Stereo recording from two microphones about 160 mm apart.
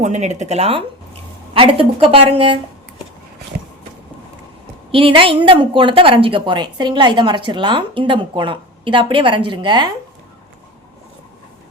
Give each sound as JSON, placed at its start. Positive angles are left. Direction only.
{"t": 0.0, "sound": "a woman's voice", "side_deg": -45}
{"t": 4.9, "sound": "a woman's voice", "side_deg": -35}